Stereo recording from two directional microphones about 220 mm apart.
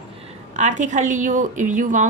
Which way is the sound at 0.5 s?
35° right (ahead or behind).